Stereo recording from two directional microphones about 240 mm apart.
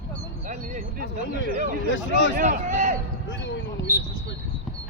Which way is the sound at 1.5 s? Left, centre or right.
Right.